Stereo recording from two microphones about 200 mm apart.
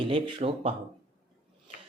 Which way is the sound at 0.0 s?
25° right (ahead or behind).